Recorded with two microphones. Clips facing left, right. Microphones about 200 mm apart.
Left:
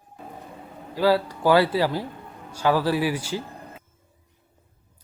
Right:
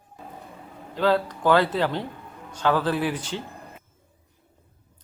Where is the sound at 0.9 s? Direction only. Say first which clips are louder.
Left 1 dB; 10° left (ahead or behind).